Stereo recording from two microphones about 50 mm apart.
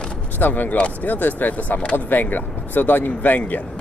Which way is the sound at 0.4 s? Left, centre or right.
Left.